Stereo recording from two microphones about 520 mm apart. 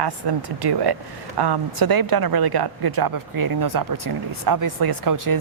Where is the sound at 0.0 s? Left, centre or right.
Right.